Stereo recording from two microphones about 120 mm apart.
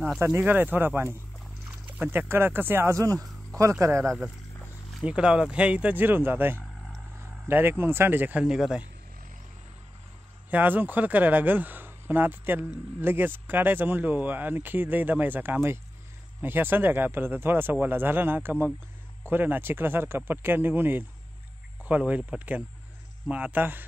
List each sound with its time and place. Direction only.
0.2 s speech: 20° right (ahead or behind)
5.0 s speech: 10° right (ahead or behind)
10.5 s speech: 15° right (ahead or behind)